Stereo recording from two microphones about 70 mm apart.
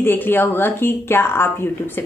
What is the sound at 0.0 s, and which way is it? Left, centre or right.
A woman's voice, left.